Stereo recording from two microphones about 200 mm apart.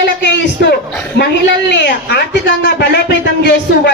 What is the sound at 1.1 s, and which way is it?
A man's voice, 55° left (ahead or behind).